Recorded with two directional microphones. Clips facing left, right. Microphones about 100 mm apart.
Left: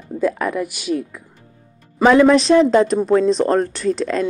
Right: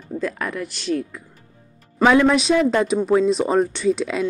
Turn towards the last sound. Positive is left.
turn(degrees=-5)  # may be behind; listen again after turning